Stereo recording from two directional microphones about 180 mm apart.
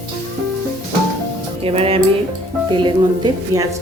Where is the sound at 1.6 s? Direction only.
30° right (ahead or behind).